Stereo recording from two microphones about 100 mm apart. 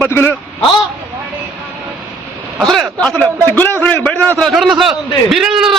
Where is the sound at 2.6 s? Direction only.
Centre (ahead or behind).